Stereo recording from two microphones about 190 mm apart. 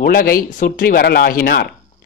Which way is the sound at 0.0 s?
50° left (ahead or behind).